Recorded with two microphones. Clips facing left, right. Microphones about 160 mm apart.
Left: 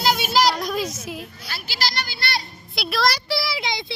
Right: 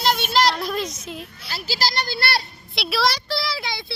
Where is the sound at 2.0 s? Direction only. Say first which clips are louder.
Right 4 dB; 60° right (ahead or behind).